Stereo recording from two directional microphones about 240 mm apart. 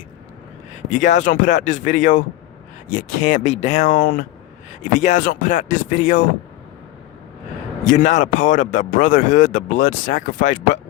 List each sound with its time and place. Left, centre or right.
1.1 s speech: left
8.1 s speech: left